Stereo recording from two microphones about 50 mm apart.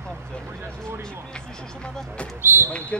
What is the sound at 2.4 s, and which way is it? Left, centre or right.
Basketball bounce, right.